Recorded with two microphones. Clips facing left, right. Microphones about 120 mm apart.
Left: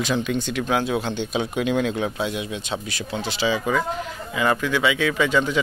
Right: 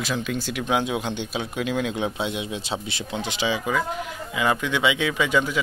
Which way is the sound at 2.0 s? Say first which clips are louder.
Left 1 dB; 20° right (ahead or behind).